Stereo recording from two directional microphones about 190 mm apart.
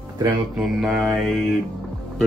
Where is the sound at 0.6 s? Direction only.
Centre (ahead or behind).